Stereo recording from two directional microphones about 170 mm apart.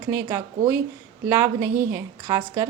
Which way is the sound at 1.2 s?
15° right (ahead or behind).